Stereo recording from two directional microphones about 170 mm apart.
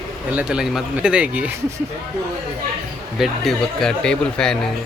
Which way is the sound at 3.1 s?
Centre (ahead or behind).